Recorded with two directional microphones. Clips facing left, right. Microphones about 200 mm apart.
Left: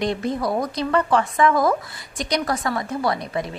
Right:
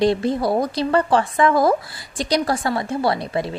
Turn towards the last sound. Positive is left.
turn(degrees=-30)  # may be behind; listen again after turning